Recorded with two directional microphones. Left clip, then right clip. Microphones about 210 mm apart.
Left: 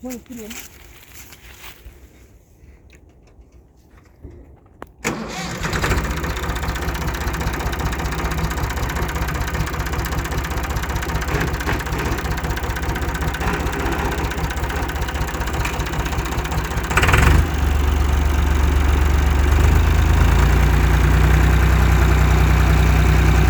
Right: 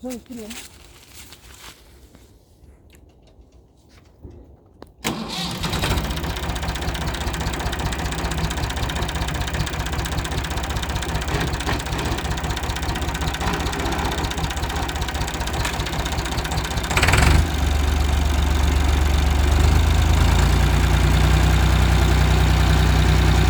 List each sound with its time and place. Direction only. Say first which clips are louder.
0.3 s speech: even; 5° left (ahead or behind)
5.0 s vehicle: left 1 dB; 40° right (ahead or behind); by 7.7 s 10° right (ahead or behind)
7.7 s vehicle: left 1 dB; 30° right (ahead or behind)
7.9 s vehicle: left 2 dB; 10° right (ahead or behind)